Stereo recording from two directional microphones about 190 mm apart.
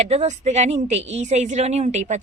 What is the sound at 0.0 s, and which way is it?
Speech, 35° right (ahead or behind).